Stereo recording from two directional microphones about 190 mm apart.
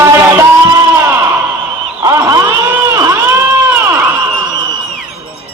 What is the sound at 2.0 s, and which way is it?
Vehicle, 15° right (ahead or behind).